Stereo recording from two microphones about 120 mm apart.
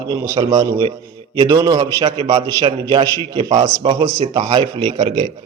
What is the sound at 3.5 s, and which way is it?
Speech, 55° right (ahead or behind).